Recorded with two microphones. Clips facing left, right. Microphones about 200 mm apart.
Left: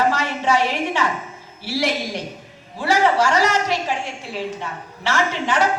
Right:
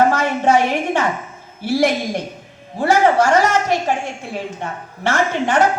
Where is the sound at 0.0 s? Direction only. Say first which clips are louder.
Right 5 dB; 50° right (ahead or behind).